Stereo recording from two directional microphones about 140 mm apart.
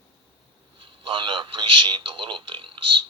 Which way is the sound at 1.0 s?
35° right (ahead or behind).